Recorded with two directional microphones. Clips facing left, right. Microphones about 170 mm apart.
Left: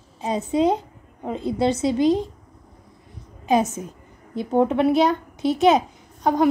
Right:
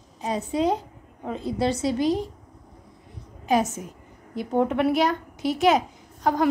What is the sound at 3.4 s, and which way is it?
A woman's voice, 20° left (ahead or behind).